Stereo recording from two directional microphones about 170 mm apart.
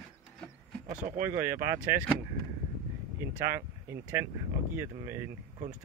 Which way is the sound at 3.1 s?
15° right (ahead or behind).